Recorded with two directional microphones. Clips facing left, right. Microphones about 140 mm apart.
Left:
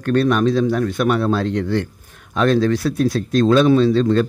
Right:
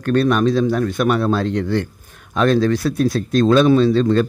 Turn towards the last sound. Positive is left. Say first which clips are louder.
# even
turn(degrees=-45)  # may be behind; listen again after turning